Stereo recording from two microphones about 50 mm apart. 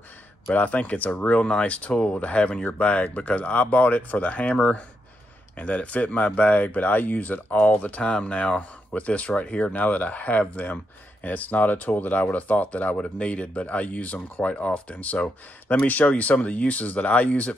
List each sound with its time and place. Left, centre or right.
0.5 s speech: left